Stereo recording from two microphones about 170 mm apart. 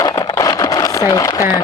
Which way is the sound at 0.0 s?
25° left (ahead or behind).